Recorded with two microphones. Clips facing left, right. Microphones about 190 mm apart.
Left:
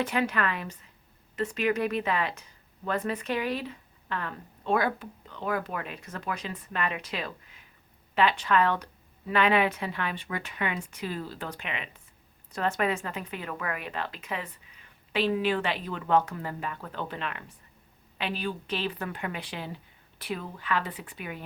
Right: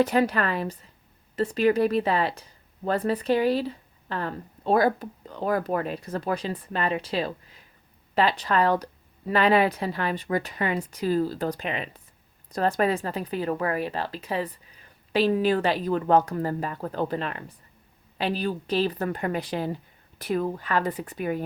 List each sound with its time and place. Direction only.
0.0 s a woman's voice: 40° right (ahead or behind)